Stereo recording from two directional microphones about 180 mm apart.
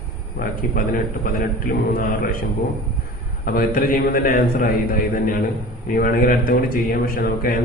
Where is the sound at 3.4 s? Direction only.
55° left (ahead or behind).